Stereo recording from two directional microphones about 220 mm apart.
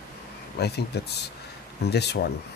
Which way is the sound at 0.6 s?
45° left (ahead or behind).